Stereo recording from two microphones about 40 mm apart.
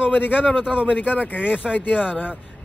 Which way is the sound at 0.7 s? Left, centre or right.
Right.